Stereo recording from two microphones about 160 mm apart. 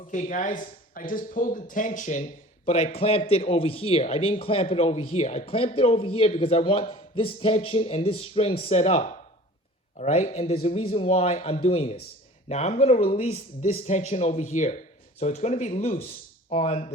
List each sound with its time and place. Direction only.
0.1 s speech: 50° left (ahead or behind)
2.2 s a man's voice: 40° left (ahead or behind)